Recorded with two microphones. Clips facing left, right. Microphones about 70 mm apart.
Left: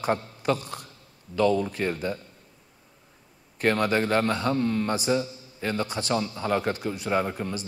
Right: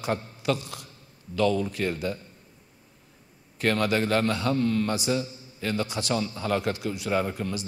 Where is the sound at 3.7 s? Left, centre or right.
Left.